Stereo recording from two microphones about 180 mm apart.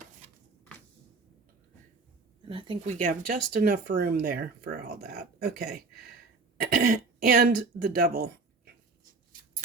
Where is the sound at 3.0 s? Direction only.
50° right (ahead or behind).